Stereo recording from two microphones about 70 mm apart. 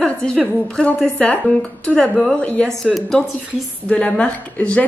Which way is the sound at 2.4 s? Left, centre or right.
Centre.